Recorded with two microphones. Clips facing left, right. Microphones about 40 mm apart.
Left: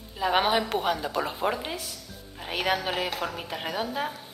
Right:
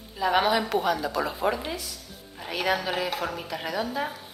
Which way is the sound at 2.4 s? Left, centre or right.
Left.